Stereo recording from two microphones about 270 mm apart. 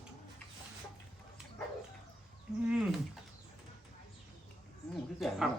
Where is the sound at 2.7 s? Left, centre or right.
Centre.